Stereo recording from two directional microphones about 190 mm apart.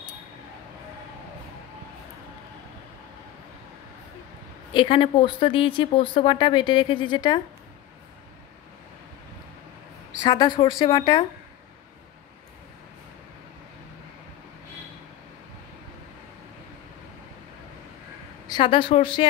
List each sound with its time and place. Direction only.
4.7 s speech: 30° left (ahead or behind)
10.2 s speech: 25° left (ahead or behind)
18.5 s speech: 25° left (ahead or behind)